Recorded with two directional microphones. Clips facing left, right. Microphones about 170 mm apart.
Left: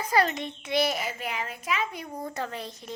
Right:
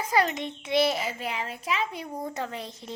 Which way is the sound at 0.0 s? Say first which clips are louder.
Even; 20° right (ahead or behind).